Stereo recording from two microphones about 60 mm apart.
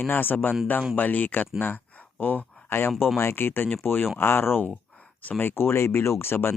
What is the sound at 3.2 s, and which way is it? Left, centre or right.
Speech, left.